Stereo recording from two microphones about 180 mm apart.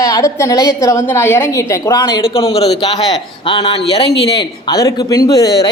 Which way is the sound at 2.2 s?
30° left (ahead or behind).